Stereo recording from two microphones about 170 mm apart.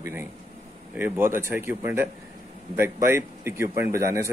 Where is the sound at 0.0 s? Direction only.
15° right (ahead or behind).